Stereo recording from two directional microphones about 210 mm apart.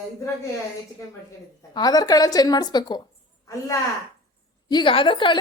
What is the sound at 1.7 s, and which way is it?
A woman's voice, 20° left (ahead or behind).